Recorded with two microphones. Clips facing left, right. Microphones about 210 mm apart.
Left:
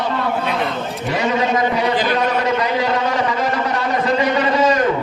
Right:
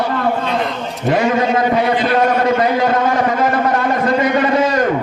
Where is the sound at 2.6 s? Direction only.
50° right (ahead or behind).